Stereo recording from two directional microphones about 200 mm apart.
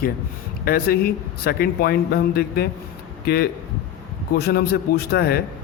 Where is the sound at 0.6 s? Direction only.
50° left (ahead or behind).